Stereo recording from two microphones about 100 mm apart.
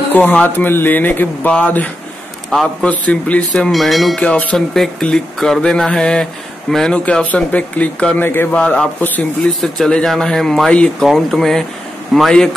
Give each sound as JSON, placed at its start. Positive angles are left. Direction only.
{"t": 0.1, "sound": "speech", "side_deg": 15}
{"t": 4.2, "sound": "speech", "side_deg": 15}